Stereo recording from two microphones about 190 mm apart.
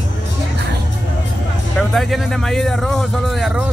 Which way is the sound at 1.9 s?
Centre (ahead or behind).